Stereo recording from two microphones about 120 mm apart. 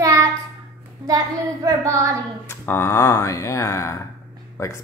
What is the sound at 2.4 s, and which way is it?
Speech, 20° left (ahead or behind).